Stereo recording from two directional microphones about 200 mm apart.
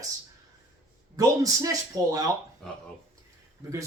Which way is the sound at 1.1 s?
15° right (ahead or behind).